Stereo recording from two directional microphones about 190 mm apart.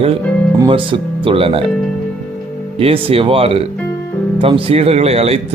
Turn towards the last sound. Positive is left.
turn(degrees=-30)  # may be behind; listen again after turning